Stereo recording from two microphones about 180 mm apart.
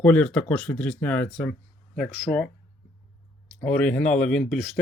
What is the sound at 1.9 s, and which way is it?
Speech, 5° right (ahead or behind).